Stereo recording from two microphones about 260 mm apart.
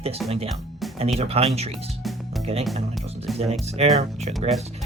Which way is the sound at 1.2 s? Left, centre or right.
Right.